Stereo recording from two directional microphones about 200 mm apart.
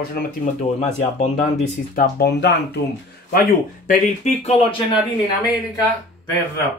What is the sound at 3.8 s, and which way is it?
Speech, 35° left (ahead or behind).